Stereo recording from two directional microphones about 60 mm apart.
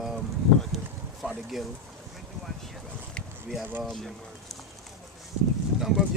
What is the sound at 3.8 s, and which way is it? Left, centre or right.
Speech, centre.